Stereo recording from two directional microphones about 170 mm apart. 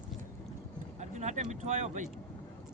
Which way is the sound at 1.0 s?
45° right (ahead or behind).